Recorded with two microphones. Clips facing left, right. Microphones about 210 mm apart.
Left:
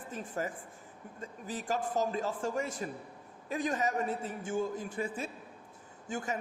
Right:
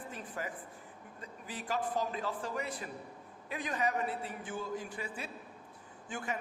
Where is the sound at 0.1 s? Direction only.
45° left (ahead or behind).